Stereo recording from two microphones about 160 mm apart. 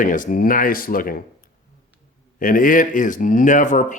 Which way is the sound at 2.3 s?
60° left (ahead or behind).